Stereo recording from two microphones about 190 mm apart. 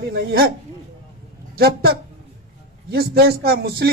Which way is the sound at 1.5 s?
55° right (ahead or behind).